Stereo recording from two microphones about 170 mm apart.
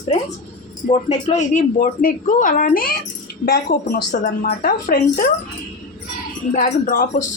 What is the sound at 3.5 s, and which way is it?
Speech, 70° left (ahead or behind).